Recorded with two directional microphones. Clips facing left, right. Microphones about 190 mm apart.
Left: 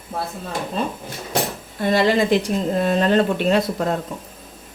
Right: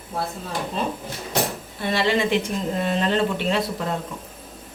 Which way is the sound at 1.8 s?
40° left (ahead or behind).